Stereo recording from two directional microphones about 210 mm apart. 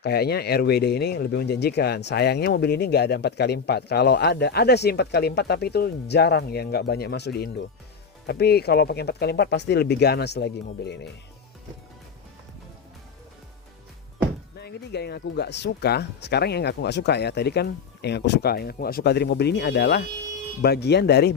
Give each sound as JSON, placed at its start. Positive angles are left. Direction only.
{"t": 0.0, "sound": "speech", "side_deg": 50}
{"t": 14.6, "sound": "speech", "side_deg": 50}